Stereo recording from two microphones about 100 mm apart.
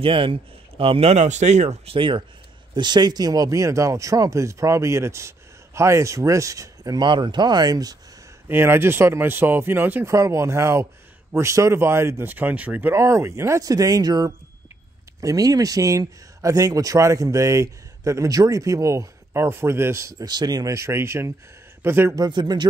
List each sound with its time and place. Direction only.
0.0 s speech: 65° right (ahead or behind); by 7.1 s 35° right (ahead or behind)
7.1 s speech: 50° right (ahead or behind)
8.5 s speech: 20° right (ahead or behind)
10.1 s speech: 30° right (ahead or behind); by 12.9 s 15° right (ahead or behind)
12.9 s speech: 30° right (ahead or behind)
20.2 s speech: 45° right (ahead or behind); by 22.1 s 25° right (ahead or behind)
22.1 s speech: 45° right (ahead or behind)